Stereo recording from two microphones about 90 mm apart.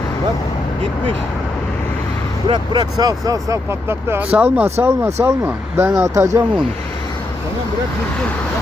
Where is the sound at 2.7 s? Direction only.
45° right (ahead or behind); by 5.9 s 25° right (ahead or behind).